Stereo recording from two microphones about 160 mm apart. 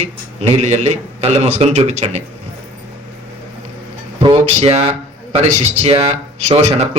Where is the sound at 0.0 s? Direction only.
40° right (ahead or behind).